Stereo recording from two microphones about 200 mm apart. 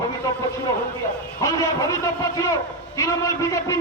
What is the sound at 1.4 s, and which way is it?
A man's voice, 15° left (ahead or behind).